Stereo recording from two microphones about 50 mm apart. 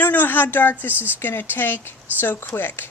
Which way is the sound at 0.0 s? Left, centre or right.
Left.